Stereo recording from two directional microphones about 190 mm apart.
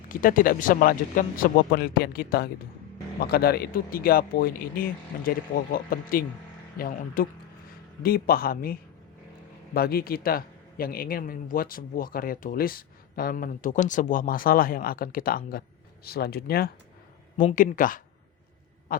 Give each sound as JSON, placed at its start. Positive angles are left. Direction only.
{"t": 0.1, "sound": "a man's voice", "side_deg": 45}
{"t": 18.9, "sound": "owl", "side_deg": 50}